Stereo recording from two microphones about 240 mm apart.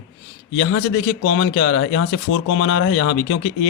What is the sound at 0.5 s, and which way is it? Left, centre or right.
A man's voice, left.